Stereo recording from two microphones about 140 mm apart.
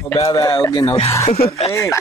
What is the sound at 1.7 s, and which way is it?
Speech, 20° left (ahead or behind).